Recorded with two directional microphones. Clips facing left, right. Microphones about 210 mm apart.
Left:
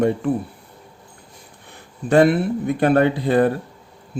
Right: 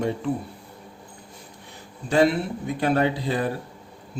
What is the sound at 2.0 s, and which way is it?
A man's voice, 55° left (ahead or behind).